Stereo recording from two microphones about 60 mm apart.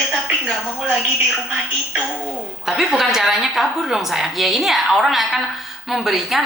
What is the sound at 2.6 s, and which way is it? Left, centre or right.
A woman's voice, centre.